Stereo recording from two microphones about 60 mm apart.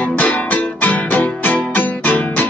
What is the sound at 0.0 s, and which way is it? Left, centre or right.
Music, left.